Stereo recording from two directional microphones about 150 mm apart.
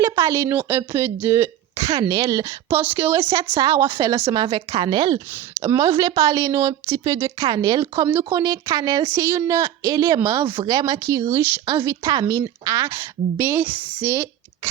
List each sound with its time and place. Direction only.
0.0 s a woman's voice: 20° right (ahead or behind)
4.4 s a woman's voice: 35° right (ahead or behind); by 14.3 s 15° right (ahead or behind)